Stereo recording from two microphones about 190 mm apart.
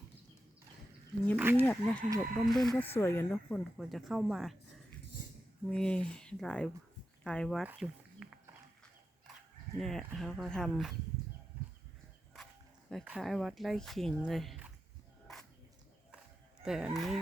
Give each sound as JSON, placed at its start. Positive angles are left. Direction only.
{"t": 1.4, "sound": "speech", "side_deg": -10}
{"t": 1.6, "sound": "speech", "side_deg": 5}
{"t": 3.8, "sound": "speech", "side_deg": 0}
{"t": 5.2, "sound": "a sound", "side_deg": 45}
{"t": 5.6, "sound": "speech", "side_deg": 5}
{"t": 7.7, "sound": "a sound", "side_deg": -5}
{"t": 9.8, "sound": "speech", "side_deg": 0}
{"t": 12.9, "sound": "speech", "side_deg": 0}
{"t": 16.6, "sound": "speech", "side_deg": 0}